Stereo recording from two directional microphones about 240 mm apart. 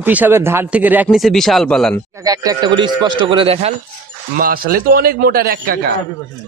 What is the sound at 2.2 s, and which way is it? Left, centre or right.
Speech, centre.